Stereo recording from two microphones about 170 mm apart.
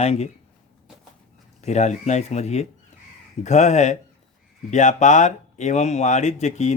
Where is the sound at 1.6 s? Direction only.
40° left (ahead or behind).